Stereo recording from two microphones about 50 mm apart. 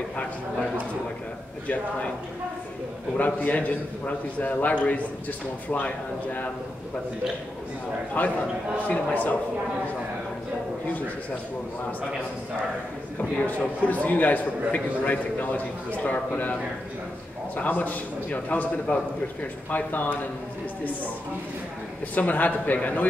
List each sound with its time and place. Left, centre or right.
3.2 s a man's voice: left
8.2 s a man's voice: left
13.2 s a man's voice: left
17.6 s a man's voice: left
22.1 s a man's voice: left